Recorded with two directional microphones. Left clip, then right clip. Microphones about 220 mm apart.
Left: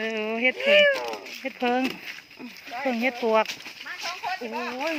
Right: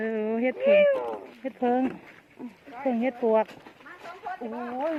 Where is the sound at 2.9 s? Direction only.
5° left (ahead or behind).